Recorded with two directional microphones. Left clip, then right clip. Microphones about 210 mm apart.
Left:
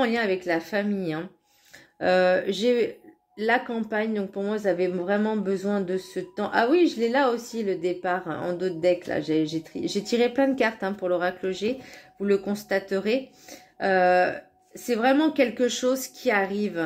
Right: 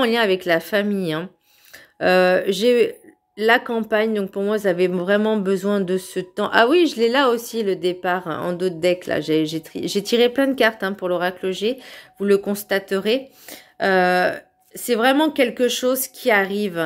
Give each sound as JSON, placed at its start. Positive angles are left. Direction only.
{"t": 0.0, "sound": "speech", "side_deg": -35}